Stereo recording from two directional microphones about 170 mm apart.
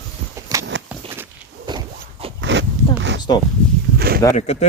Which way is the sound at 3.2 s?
25° left (ahead or behind).